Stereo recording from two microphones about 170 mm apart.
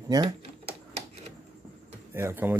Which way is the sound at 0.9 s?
40° right (ahead or behind).